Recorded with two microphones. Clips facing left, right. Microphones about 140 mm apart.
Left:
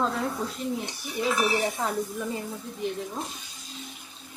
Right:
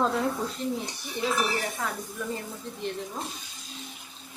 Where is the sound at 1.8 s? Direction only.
20° left (ahead or behind).